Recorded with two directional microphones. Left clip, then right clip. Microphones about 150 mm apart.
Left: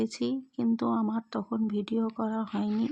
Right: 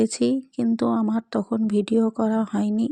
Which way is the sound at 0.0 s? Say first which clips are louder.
Right 9 dB; 40° right (ahead or behind).